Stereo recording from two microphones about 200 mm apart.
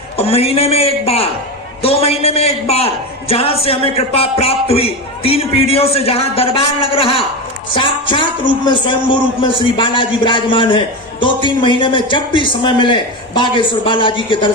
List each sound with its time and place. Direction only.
0.2 s a man's voice: 30° left (ahead or behind)